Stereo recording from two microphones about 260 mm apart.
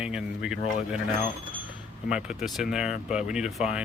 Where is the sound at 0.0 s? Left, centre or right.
Centre.